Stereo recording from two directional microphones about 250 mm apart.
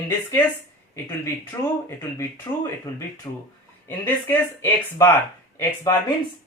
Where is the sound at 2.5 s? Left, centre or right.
Centre.